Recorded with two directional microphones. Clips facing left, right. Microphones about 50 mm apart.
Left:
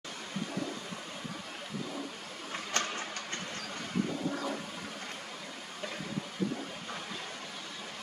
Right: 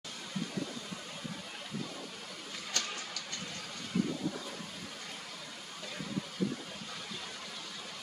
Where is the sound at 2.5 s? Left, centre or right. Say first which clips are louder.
Left 5 dB; left.